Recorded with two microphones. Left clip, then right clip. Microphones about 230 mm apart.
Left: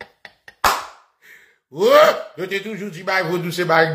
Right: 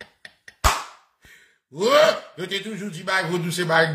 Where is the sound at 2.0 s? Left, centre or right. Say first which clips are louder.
Left 4 dB; centre.